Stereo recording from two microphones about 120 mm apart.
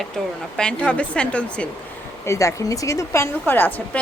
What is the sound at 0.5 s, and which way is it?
A woman's voice, 5° left (ahead or behind).